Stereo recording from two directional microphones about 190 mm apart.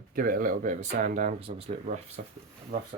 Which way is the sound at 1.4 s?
30° right (ahead or behind).